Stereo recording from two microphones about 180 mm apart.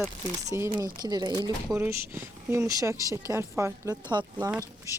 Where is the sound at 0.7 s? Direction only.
20° right (ahead or behind).